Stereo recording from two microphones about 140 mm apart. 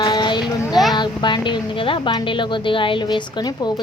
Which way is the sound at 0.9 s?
35° left (ahead or behind).